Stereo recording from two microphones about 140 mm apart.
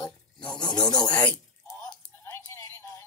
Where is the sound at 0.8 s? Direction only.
30° left (ahead or behind).